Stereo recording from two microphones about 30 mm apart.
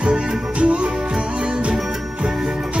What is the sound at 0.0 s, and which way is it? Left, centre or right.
Music, right.